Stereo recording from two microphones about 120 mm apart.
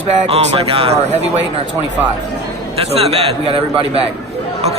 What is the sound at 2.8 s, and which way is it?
A man's voice, 55° right (ahead or behind).